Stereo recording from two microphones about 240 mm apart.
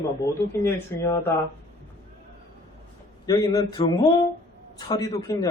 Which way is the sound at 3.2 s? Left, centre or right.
Centre.